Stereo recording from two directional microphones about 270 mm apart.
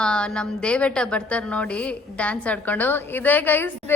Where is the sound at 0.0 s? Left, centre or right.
Centre.